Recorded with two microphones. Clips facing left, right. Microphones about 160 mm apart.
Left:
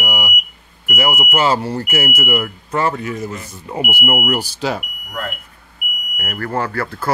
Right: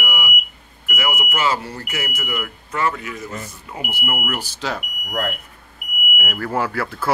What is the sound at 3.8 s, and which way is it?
Speech, 15° left (ahead or behind).